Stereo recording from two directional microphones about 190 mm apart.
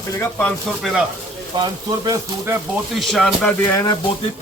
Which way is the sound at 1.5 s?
20° right (ahead or behind).